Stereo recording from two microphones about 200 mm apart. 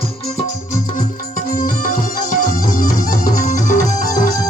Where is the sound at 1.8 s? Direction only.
40° left (ahead or behind).